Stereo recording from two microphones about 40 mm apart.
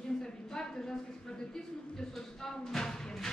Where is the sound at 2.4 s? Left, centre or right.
Centre.